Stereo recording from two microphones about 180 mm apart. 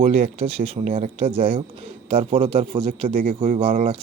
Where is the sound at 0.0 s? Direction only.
35° right (ahead or behind).